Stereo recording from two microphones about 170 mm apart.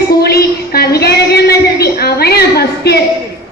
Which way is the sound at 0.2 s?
65° left (ahead or behind).